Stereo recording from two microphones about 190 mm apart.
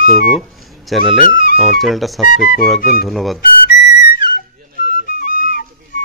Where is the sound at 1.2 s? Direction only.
45° left (ahead or behind).